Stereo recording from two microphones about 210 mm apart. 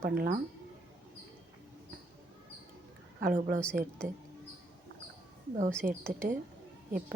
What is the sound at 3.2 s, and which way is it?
Speech, 40° right (ahead or behind).